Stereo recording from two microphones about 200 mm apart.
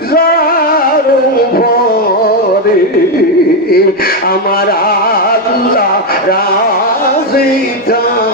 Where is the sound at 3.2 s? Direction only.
50° left (ahead or behind).